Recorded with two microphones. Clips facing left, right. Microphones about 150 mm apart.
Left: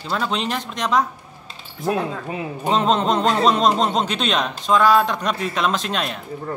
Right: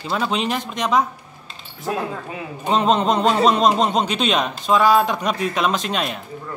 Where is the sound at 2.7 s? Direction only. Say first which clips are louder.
Right 1 dB; centre (ahead or behind).